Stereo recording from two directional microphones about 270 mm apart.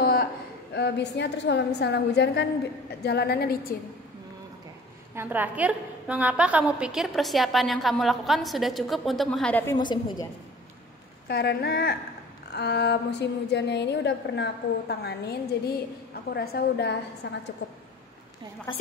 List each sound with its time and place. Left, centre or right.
0.0 s a sound: left
0.7 s a woman's voice: left
5.1 s a woman's voice: centre
11.2 s a woman's voice: left
16.3 s a woman's voice: left